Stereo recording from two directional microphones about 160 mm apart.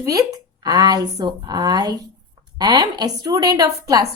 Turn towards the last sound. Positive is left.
turn(degrees=-20)  # may be behind; listen again after turning